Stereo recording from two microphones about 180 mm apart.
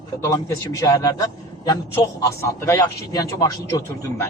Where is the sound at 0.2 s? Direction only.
20° left (ahead or behind).